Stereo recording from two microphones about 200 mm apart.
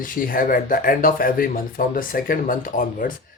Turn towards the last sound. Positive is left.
turn(degrees=45)  # may be behind; listen again after turning